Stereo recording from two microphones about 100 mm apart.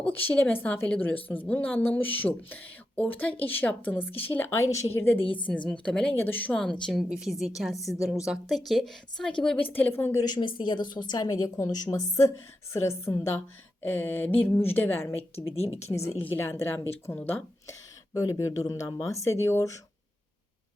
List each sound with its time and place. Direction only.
0.1 s a woman's voice: 20° left (ahead or behind)
5.2 s a woman's voice: 60° left (ahead or behind)
5.5 s a woman's voice: 10° left (ahead or behind)
6.6 s a woman's voice: 5° left (ahead or behind)
9.6 s a woman's voice: 20° left (ahead or behind)
10.2 s a woman's voice: 45° left (ahead or behind); by 15.2 s 20° left (ahead or behind)
15.4 s speech: 80° left
16.2 s a woman's voice: 20° left (ahead or behind)
18.1 s a woman's voice: 35° left (ahead or behind)